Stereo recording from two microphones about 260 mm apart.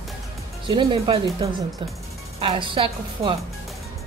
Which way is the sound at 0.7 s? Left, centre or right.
Centre.